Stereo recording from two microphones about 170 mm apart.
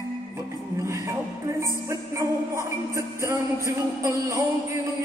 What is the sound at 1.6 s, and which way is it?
Music, 15° right (ahead or behind).